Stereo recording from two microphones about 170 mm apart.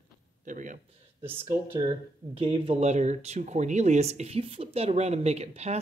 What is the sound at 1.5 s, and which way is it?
Speech, 25° right (ahead or behind).